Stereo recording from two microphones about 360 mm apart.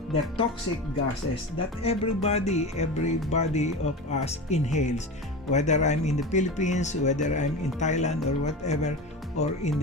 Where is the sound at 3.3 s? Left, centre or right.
Centre.